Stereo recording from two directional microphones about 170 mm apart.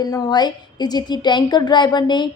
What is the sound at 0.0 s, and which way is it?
A woman's voice, 20° left (ahead or behind).